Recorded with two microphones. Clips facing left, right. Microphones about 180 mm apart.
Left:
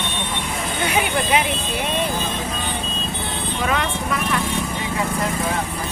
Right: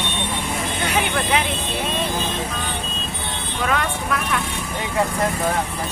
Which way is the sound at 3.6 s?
5° left (ahead or behind).